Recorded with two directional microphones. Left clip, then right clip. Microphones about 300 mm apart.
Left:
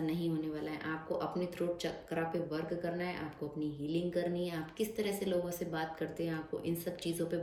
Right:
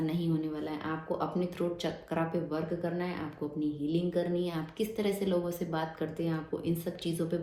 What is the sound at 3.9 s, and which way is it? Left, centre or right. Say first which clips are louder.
A woman's voice: right 3 dB; centre.